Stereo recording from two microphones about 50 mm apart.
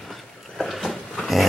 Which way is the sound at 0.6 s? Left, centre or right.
Centre.